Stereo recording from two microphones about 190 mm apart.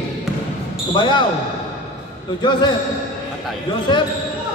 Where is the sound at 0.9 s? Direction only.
25° left (ahead or behind).